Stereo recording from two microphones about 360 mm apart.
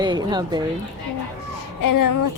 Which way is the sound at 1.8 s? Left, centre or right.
Left.